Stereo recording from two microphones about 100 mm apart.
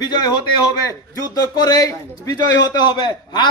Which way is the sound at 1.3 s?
40° left (ahead or behind).